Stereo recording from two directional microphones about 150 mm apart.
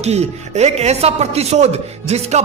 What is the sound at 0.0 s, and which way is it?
Speech, 45° right (ahead or behind).